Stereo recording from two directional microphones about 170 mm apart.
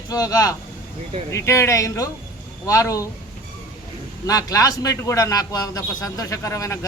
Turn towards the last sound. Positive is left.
turn(degrees=20)  # may be behind; listen again after turning